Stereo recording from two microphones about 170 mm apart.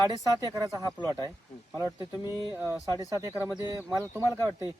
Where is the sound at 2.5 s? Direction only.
10° right (ahead or behind).